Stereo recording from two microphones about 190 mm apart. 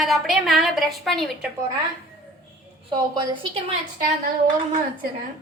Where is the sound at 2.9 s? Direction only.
25° right (ahead or behind).